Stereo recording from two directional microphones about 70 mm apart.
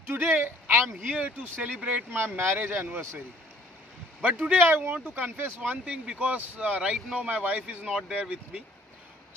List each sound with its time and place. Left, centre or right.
0.1 s speech: right; by 2.0 s centre
2.1 s speech: right
4.2 s speech: right
7.9 s speech: centre